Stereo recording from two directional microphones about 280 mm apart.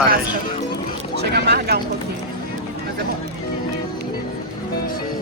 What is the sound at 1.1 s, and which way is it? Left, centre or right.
Speech, right.